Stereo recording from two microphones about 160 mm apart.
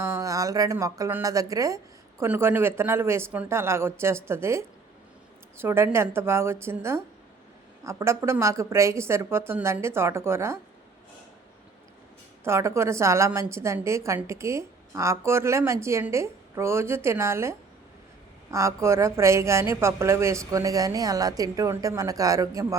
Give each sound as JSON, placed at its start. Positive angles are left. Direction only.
{"t": 0.0, "sound": "a woman's voice", "side_deg": -20}
{"t": 12.5, "sound": "a woman's voice", "side_deg": -15}